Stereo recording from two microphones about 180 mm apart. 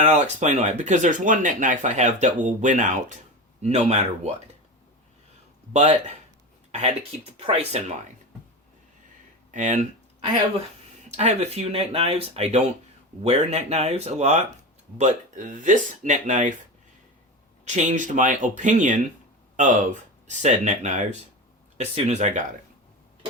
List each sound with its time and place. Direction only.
0.0 s speech: 40° right (ahead or behind)
5.7 s speech: 40° right (ahead or behind)
9.5 s a sound: 45° right (ahead or behind)
11.2 s speech: 35° right (ahead or behind)
17.7 s speech: 40° right (ahead or behind)